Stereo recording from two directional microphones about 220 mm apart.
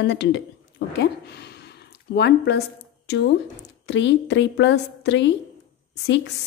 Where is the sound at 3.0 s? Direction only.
55° left (ahead or behind).